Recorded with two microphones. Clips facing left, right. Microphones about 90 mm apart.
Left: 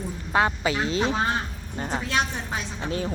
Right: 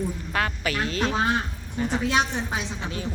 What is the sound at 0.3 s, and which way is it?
Speech, 20° left (ahead or behind).